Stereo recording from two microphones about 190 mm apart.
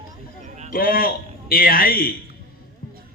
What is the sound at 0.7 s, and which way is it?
A man's voice, 50° left (ahead or behind).